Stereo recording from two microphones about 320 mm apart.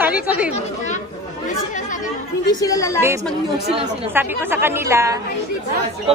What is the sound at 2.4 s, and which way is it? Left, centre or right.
Speech, centre.